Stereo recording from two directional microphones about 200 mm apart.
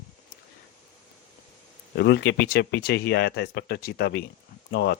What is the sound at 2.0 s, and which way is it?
A man's voice, 55° left (ahead or behind).